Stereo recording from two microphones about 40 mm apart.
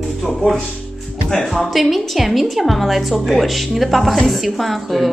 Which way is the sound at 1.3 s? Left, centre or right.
Centre.